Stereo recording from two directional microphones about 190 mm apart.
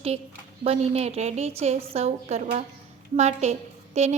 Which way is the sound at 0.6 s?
35° right (ahead or behind).